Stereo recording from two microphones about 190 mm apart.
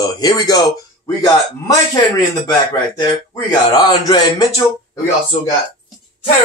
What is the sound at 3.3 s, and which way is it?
Speech, 20° left (ahead or behind).